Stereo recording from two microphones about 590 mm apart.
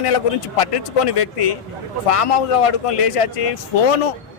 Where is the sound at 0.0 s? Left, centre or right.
Left.